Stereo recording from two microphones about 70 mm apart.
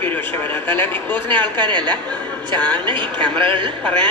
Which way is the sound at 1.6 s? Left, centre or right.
Right.